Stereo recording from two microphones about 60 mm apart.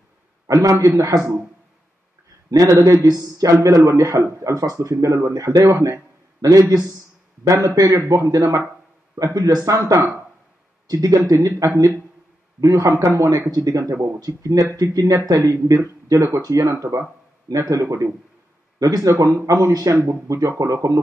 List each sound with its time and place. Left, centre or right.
0.5 s speech: right
2.5 s a man's voice: right
6.4 s a man's voice: right
7.4 s a man's voice: right
9.7 s a man's voice: right
12.9 s a man's voice: right
17.7 s a man's voice: right
18.8 s a man's voice: right
20.5 s speech: right